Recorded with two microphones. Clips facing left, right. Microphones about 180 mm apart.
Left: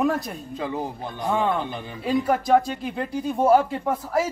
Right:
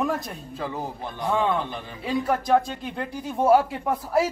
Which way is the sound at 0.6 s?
15° left (ahead or behind).